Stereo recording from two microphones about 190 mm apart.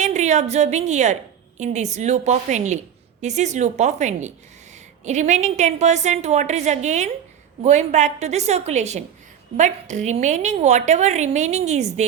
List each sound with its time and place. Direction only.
0.0 s a woman's voice: 40° right (ahead or behind)